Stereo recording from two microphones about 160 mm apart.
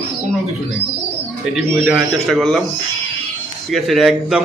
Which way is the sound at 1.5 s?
5° right (ahead or behind).